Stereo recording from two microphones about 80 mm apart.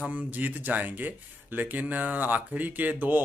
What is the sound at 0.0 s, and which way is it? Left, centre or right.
Speech, right.